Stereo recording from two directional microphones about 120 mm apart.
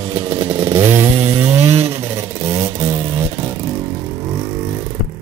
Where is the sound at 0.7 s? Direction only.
20° right (ahead or behind).